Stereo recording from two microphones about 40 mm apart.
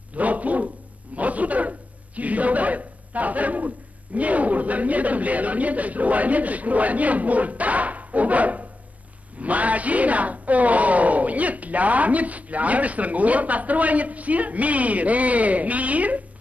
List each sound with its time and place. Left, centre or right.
0.1 s dog: right
1.1 s a sound: right
9.4 s speech: right